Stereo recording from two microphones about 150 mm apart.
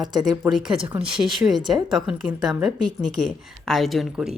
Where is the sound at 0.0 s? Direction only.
30° right (ahead or behind).